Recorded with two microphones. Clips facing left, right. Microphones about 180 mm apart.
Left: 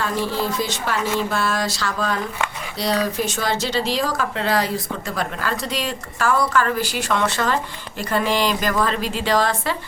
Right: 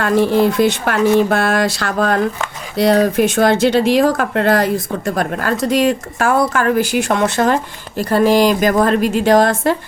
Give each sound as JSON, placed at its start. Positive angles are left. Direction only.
{"t": 0.0, "sound": "speech", "side_deg": -60}